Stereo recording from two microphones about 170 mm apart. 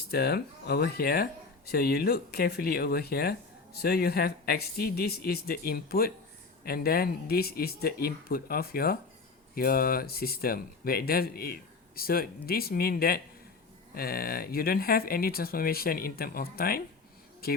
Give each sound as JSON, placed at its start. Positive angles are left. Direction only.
{"t": 0.1, "sound": "speech", "side_deg": 70}